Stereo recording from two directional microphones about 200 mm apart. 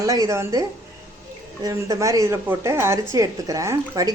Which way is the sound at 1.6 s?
15° right (ahead or behind).